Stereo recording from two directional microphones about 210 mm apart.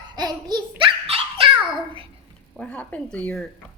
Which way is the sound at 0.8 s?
25° right (ahead or behind).